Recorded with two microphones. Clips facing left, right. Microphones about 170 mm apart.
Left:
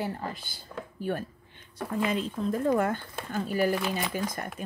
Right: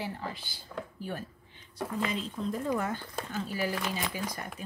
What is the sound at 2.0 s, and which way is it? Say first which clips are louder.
Speech: left 5 dB; 55° left (ahead or behind).